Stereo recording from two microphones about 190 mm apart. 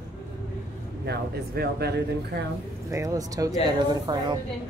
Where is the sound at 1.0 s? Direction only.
55° right (ahead or behind).